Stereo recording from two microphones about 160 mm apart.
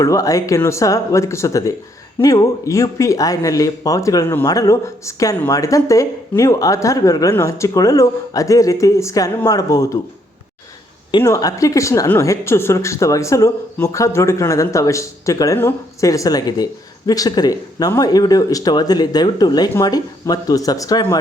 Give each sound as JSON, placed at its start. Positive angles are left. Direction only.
{"t": 0.0, "sound": "speech", "side_deg": 20}
{"t": 11.2, "sound": "speech", "side_deg": 20}